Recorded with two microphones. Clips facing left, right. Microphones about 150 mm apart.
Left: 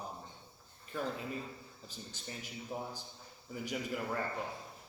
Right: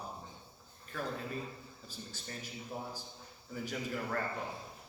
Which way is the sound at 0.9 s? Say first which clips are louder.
Left 1 dB; 15° left (ahead or behind).